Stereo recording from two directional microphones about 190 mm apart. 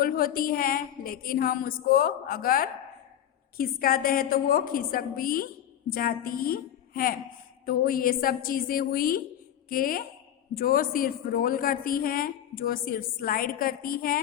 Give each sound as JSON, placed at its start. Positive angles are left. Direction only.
{"t": 0.0, "sound": "a woman's voice", "side_deg": 50}